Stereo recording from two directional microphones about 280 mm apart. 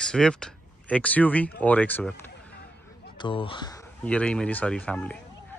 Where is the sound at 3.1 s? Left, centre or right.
Centre.